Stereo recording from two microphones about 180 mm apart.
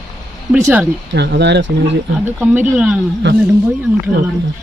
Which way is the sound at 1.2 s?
70° right (ahead or behind).